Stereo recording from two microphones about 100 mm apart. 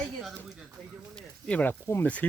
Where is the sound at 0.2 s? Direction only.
5° right (ahead or behind).